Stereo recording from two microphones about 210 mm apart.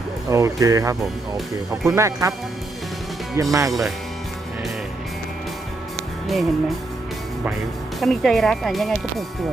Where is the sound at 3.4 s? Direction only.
15° right (ahead or behind).